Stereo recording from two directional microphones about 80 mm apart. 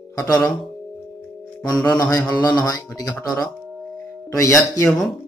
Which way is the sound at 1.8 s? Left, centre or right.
Left.